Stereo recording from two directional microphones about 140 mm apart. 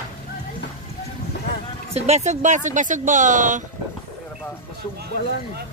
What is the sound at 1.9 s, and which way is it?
Speech, 50° right (ahead or behind).